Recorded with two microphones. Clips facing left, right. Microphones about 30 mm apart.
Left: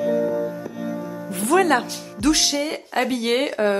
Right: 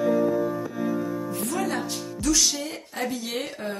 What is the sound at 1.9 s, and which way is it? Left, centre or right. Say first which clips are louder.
Speech: left 4 dB; left.